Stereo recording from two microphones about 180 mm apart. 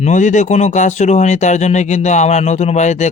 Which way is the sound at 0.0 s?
40° left (ahead or behind).